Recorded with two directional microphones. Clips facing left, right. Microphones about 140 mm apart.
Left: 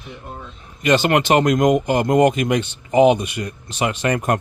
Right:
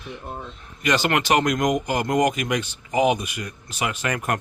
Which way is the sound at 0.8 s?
25° left (ahead or behind).